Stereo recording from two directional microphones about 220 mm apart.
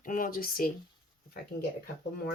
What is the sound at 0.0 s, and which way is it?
Speech, 40° left (ahead or behind).